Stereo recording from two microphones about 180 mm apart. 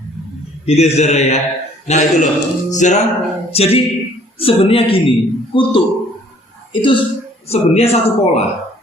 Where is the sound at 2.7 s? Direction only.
40° left (ahead or behind).